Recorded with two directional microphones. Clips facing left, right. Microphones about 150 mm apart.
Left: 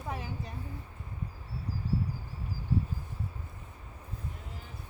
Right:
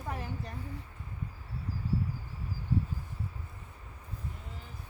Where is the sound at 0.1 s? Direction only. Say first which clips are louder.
Even; 5° left (ahead or behind).